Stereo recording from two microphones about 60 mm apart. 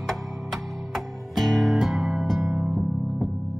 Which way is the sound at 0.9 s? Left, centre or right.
Centre.